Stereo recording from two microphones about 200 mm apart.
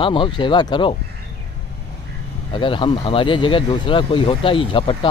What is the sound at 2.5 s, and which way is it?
Speech, 25° left (ahead or behind).